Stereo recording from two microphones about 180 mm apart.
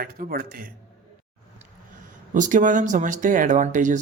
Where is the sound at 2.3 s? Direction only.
45° right (ahead or behind).